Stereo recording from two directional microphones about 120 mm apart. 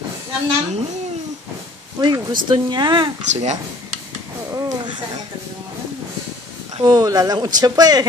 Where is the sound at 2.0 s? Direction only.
35° right (ahead or behind).